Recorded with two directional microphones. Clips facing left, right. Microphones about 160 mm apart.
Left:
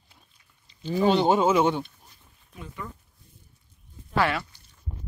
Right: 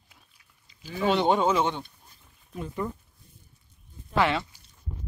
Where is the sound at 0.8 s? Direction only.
30° left (ahead or behind).